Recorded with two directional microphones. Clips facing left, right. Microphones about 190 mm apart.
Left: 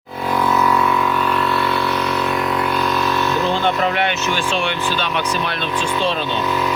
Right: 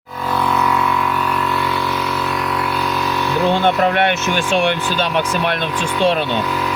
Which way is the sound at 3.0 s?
15° right (ahead or behind).